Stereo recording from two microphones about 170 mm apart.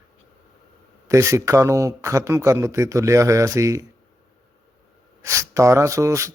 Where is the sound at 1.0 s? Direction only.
15° right (ahead or behind).